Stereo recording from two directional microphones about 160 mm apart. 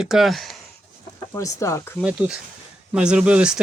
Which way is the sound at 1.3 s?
20° left (ahead or behind).